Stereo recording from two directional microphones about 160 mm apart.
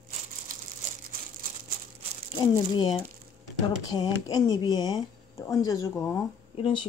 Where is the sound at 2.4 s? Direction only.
30° left (ahead or behind).